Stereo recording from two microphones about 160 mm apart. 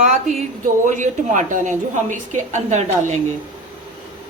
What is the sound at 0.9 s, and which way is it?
A woman's voice, 50° right (ahead or behind).